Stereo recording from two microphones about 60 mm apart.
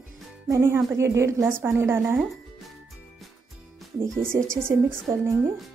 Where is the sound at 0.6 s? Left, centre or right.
Right.